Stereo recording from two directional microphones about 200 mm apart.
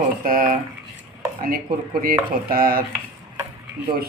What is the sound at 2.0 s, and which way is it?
Speech, 45° right (ahead or behind).